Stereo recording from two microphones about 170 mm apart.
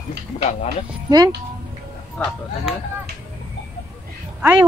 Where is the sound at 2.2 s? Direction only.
5° left (ahead or behind).